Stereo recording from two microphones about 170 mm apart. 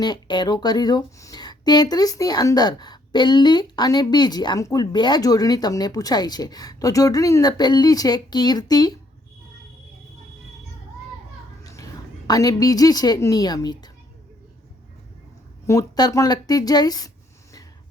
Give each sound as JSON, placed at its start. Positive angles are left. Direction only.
{"t": 0.0, "sound": "speech", "side_deg": 25}
{"t": 11.6, "sound": "a sound", "side_deg": 20}
{"t": 12.3, "sound": "speech", "side_deg": 20}
{"t": 15.6, "sound": "speech", "side_deg": 20}